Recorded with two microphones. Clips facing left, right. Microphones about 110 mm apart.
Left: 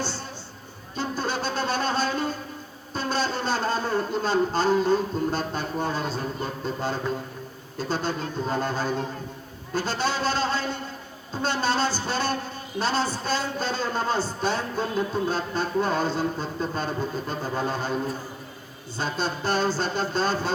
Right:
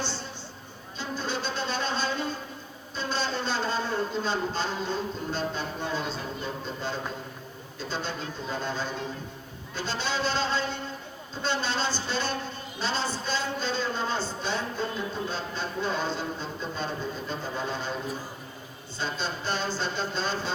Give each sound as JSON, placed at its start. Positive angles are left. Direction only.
{"t": 0.9, "sound": "music", "side_deg": 45}
{"t": 2.9, "sound": "speech", "side_deg": 45}
{"t": 18.9, "sound": "speech", "side_deg": 45}